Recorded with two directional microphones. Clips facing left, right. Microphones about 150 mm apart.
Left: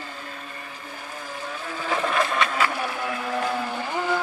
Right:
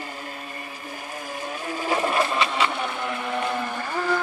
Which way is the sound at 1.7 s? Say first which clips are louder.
Right 1 dB; 15° right (ahead or behind).